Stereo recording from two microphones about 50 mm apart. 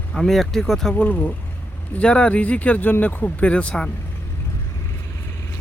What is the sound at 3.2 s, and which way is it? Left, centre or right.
Speech, left.